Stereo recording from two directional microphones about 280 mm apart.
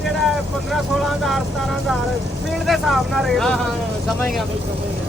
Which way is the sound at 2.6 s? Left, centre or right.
Centre.